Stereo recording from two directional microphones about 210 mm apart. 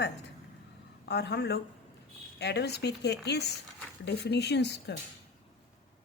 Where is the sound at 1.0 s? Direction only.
55° left (ahead or behind).